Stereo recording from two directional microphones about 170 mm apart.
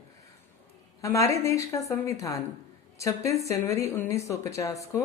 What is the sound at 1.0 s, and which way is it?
Speech, 20° left (ahead or behind).